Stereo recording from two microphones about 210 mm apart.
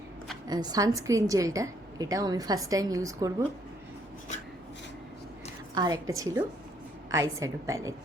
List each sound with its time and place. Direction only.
0.4 s a woman's voice: 20° right (ahead or behind)
5.7 s a woman's voice: 20° right (ahead or behind)